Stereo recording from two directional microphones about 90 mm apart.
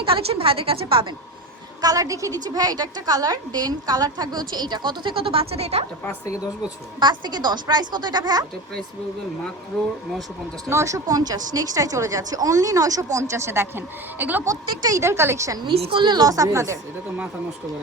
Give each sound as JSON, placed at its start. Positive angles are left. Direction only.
{"t": 0.0, "sound": "a woman's voice", "side_deg": -90}
{"t": 1.8, "sound": "a woman's voice", "side_deg": -40}
{"t": 7.0, "sound": "a woman's voice", "side_deg": -55}
{"t": 10.7, "sound": "speech", "side_deg": -35}
{"t": 14.4, "sound": "speech", "side_deg": -40}
{"t": 15.6, "sound": "a woman's voice", "side_deg": -75}